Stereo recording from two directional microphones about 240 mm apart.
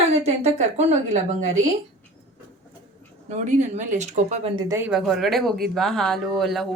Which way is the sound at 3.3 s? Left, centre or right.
Right.